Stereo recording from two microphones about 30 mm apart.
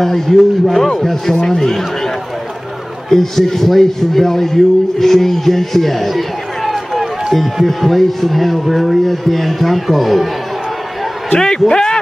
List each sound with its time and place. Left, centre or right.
0.0 s a man's voice: centre
1.6 s a man's voice: centre
3.1 s a man's voice: centre
11.3 s a man's voice: left
11.7 s a sound: left